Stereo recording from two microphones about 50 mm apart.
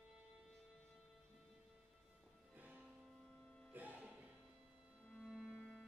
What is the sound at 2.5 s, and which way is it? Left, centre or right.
Music, right.